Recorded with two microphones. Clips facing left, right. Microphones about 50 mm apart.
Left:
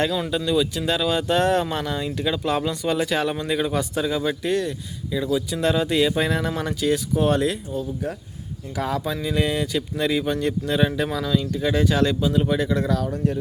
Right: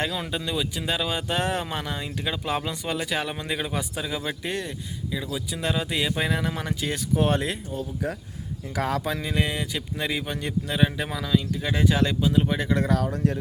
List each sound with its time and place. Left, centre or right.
0.0 s speech: centre
5.1 s speech: centre
7.2 s speech: right
8.7 s speech: right
9.0 s speech: right
9.3 s speech: centre
12.5 s speech: right